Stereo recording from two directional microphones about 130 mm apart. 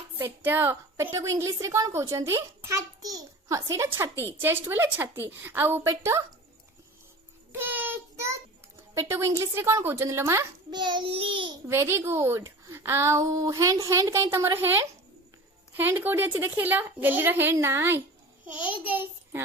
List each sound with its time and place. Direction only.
0.2 s a woman's voice: 15° right (ahead or behind)
7.5 s child singing: 15° right (ahead or behind)
9.0 s a woman's voice: 20° right (ahead or behind)
10.7 s a child's voice: 35° right (ahead or behind)
11.7 s a woman's voice: 20° right (ahead or behind)